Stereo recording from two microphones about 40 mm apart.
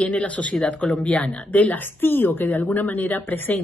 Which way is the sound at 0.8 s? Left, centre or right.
Left.